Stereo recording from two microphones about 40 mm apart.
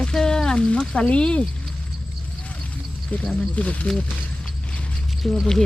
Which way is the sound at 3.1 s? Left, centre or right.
Left.